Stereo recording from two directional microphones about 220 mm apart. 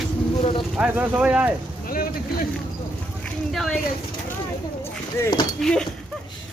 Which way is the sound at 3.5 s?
Centre (ahead or behind).